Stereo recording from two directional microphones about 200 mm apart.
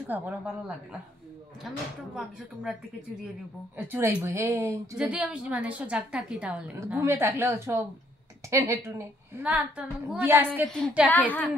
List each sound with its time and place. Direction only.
0.0 s a woman's voice: 10° right (ahead or behind)
3.7 s a woman's voice: 10° right (ahead or behind)
10.7 s a woman's voice: 5° left (ahead or behind)